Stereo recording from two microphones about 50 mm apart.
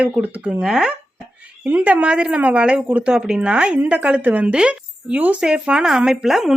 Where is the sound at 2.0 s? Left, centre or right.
Right.